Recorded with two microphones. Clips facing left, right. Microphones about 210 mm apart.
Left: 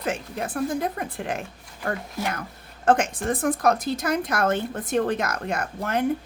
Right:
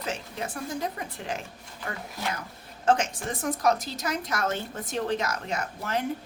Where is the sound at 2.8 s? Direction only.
55° left (ahead or behind).